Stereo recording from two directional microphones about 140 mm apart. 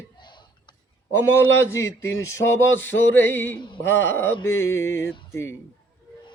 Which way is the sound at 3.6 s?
35° left (ahead or behind).